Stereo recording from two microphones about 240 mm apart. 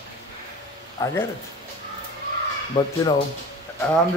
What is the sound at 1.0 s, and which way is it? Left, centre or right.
Speech, centre.